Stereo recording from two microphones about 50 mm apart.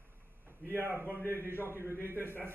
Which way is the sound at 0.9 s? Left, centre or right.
Right.